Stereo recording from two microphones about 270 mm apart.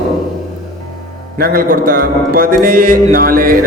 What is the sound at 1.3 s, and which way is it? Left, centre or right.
Music, right.